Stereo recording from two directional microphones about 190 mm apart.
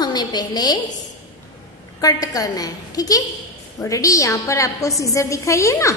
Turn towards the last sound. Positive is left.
turn(degrees=15)  # may be behind; listen again after turning